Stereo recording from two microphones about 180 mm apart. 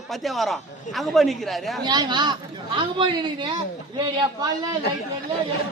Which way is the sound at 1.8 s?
25° right (ahead or behind).